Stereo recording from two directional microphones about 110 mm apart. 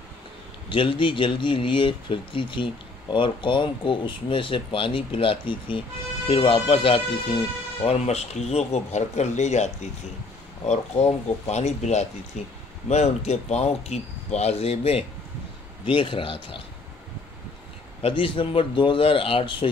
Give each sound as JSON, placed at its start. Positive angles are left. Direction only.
{"t": 0.7, "sound": "speech", "side_deg": 50}
{"t": 7.8, "sound": "speech", "side_deg": 70}
{"t": 12.8, "sound": "speech", "side_deg": 80}
{"t": 15.8, "sound": "speech", "side_deg": 50}
{"t": 18.0, "sound": "speech", "side_deg": 50}